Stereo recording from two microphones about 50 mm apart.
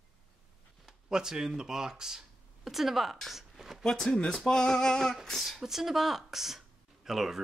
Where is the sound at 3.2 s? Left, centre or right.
Centre.